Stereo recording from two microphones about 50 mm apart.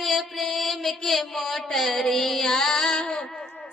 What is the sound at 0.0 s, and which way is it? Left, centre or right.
Mantra, centre.